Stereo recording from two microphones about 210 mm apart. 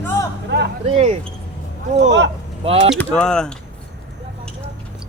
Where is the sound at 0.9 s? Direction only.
30° right (ahead or behind).